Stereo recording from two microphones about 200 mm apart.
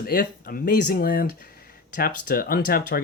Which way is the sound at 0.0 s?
45° left (ahead or behind).